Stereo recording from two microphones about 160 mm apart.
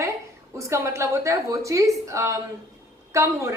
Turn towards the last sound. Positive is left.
turn(degrees=-20)  # may be behind; listen again after turning